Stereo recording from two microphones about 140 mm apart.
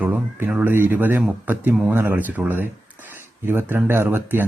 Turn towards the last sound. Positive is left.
turn(degrees=-15)  # may be behind; listen again after turning